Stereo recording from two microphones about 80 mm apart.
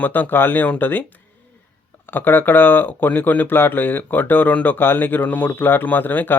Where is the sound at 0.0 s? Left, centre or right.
Left.